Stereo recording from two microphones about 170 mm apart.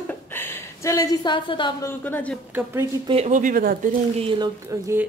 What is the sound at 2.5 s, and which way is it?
Speech, 15° right (ahead or behind).